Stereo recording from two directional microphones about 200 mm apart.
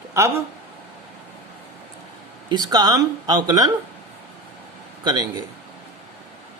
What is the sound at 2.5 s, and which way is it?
Speech, 20° right (ahead or behind).